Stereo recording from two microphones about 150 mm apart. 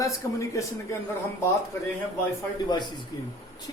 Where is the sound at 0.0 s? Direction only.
20° left (ahead or behind).